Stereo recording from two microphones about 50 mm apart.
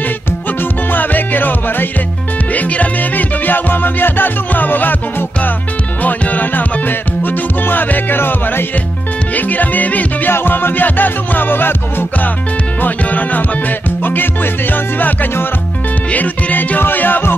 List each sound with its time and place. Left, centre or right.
0.9 s music: left
6.0 s music: left
7.6 s music: left
9.3 s music: left
10.3 s music: left
12.8 s music: left